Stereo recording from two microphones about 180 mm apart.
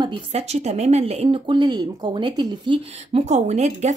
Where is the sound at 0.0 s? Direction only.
30° right (ahead or behind).